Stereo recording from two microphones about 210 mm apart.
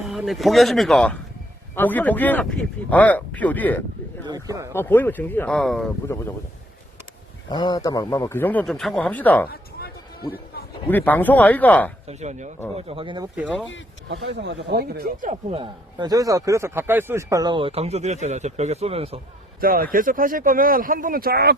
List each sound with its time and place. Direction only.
0.1 s speech: centre (ahead or behind)
4.3 s speech: 15° right (ahead or behind)
4.7 s speech: 10° left (ahead or behind)
6.1 s speech: 10° left (ahead or behind)
7.5 s speech: 20° left (ahead or behind)
10.8 s speech: 10° left (ahead or behind)
12.0 s speech: 30° right (ahead or behind)
13.3 s speech: 5° right (ahead or behind)
14.1 s speech: 55° right (ahead or behind); by 19.2 s 30° right (ahead or behind)
19.5 s speech: 45° right (ahead or behind)